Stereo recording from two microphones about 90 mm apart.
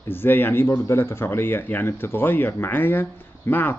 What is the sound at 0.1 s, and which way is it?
Speech, 20° left (ahead or behind).